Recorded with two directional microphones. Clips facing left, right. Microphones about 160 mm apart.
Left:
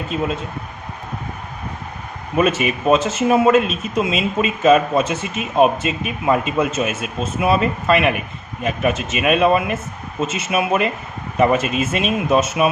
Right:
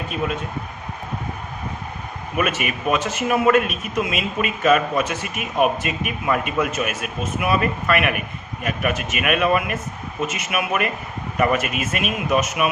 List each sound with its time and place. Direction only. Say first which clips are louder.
2.3 s speech: left 6 dB; 30° left (ahead or behind)